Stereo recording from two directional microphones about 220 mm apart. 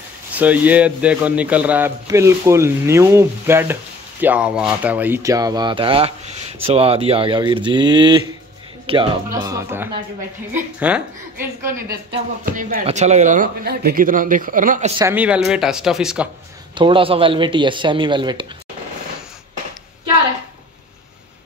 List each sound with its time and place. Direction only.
0.3 s speech: 5° right (ahead or behind)
11.7 s speech: 40° right (ahead or behind)
15.0 s speech: 10° right (ahead or behind)
16.7 s speech: 20° right (ahead or behind)